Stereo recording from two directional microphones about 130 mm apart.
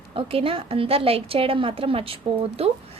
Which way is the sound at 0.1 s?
45° right (ahead or behind).